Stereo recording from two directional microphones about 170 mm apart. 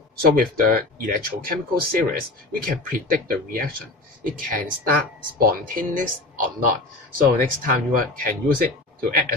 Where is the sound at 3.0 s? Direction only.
55° right (ahead or behind).